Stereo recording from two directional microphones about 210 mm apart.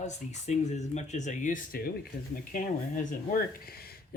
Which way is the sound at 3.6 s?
45° left (ahead or behind).